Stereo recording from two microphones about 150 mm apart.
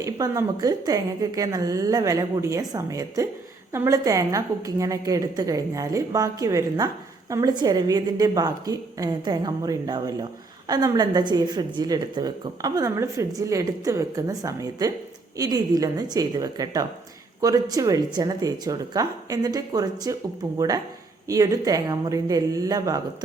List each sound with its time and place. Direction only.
0.0 s a woman's voice: 25° right (ahead or behind)